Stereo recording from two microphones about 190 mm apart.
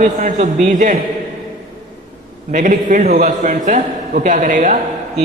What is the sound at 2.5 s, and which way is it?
A man's voice, 40° right (ahead or behind).